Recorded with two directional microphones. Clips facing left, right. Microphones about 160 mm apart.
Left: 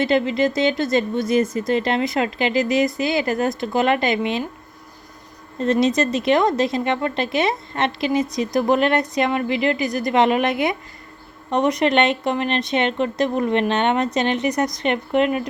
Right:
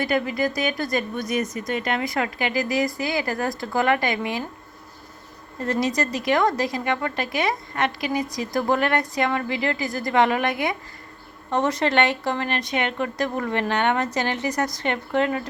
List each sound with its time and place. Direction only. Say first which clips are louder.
0.0 s a woman's voice: left 5 dB; 25° left (ahead or behind)
5.5 s a woman's voice: left 5 dB; 20° left (ahead or behind)